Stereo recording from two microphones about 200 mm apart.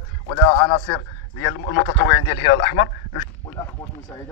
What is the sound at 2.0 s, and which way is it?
Speech, 20° left (ahead or behind).